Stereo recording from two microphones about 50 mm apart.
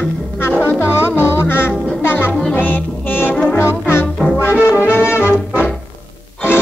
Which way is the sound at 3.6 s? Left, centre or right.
Left.